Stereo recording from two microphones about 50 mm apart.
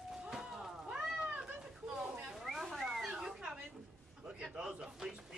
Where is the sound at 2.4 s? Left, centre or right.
Centre.